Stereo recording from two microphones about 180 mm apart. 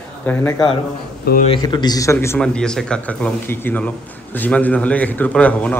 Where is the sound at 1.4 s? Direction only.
25° left (ahead or behind).